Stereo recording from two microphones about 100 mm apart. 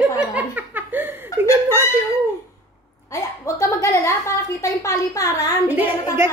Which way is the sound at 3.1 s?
30° left (ahead or behind).